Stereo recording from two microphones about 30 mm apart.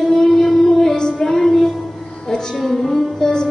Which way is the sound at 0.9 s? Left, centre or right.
Left.